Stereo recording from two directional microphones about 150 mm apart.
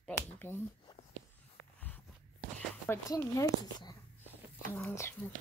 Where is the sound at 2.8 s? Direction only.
20° left (ahead or behind).